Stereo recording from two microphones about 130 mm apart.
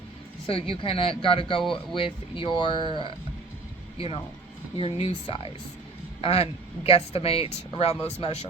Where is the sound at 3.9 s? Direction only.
50° left (ahead or behind).